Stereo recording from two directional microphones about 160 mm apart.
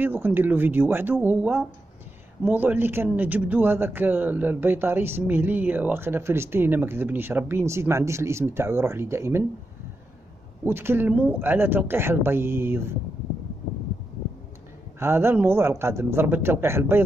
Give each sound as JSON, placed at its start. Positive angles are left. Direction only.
{"t": 0.0, "sound": "speech", "side_deg": -10}
{"t": 10.6, "sound": "speech", "side_deg": -15}
{"t": 15.0, "sound": "speech", "side_deg": -15}